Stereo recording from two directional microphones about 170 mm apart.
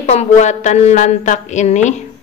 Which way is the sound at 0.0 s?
40° left (ahead or behind).